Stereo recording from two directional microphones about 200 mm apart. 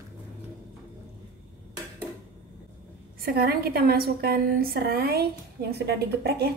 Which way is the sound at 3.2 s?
50° right (ahead or behind).